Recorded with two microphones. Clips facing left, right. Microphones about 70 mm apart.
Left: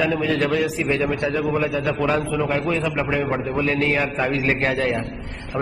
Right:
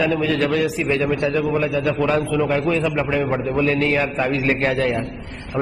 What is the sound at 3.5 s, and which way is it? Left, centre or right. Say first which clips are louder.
Speech: right 3 dB; centre.